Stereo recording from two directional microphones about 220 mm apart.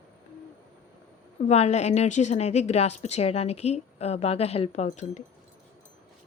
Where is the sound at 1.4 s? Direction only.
30° left (ahead or behind).